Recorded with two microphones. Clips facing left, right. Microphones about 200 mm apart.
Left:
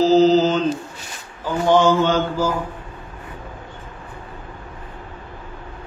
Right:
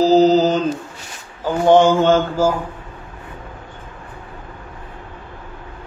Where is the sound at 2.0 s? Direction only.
50° right (ahead or behind).